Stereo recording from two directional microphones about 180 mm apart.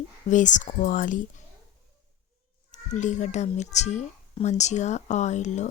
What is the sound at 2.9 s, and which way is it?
A woman's voice, 45° left (ahead or behind).